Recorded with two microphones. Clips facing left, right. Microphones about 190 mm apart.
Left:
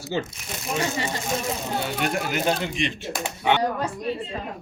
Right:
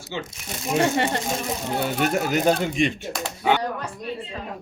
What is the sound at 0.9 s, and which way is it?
Speech, 65° right (ahead or behind).